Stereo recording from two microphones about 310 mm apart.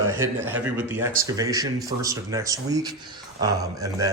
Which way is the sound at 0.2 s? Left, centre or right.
Centre.